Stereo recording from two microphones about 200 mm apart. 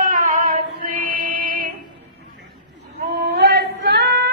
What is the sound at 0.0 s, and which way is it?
Music, 40° right (ahead or behind).